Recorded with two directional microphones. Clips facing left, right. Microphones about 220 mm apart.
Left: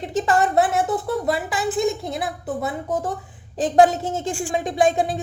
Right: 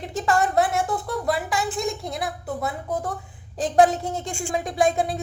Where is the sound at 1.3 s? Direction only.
Centre (ahead or behind).